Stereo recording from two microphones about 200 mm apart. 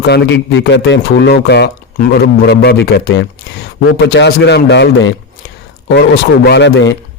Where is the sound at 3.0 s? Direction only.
65° left (ahead or behind).